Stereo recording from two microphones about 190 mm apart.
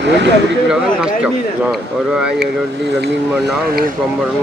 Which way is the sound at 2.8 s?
65° right (ahead or behind).